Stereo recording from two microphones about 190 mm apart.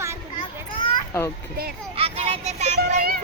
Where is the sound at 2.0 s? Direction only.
30° right (ahead or behind).